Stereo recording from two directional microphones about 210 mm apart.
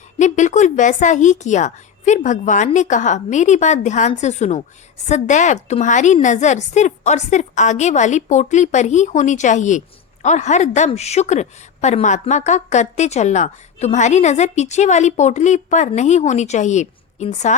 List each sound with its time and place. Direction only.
0.2 s a woman's voice: 35° left (ahead or behind)